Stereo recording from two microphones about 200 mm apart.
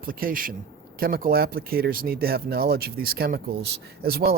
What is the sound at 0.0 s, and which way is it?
Speech, 45° right (ahead or behind).